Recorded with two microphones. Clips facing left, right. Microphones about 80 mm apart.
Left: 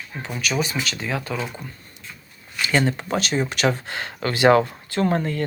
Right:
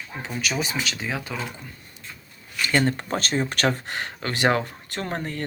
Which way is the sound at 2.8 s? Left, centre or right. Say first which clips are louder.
Left 2 dB; right.